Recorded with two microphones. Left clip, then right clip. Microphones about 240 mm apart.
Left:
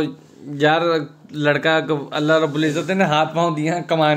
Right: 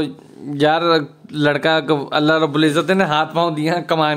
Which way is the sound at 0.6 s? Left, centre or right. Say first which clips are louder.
Right 2 dB; right.